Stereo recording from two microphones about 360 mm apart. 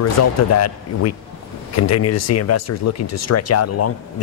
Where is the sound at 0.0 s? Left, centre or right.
Left.